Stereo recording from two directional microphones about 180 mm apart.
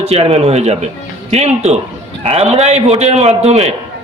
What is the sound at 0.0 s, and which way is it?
A man's voice, 35° right (ahead or behind).